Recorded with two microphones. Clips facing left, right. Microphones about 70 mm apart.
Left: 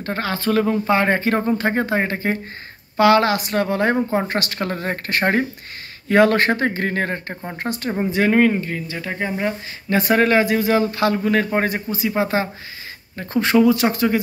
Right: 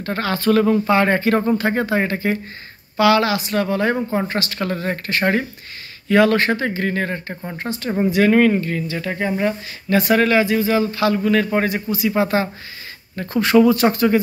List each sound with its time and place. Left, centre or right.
0.0 s speech: centre
3.0 s a man's voice: left
8.1 s speech: centre
9.8 s a man's voice: left
10.4 s a man's voice: left
12.2 s speech: left
13.6 s speech: centre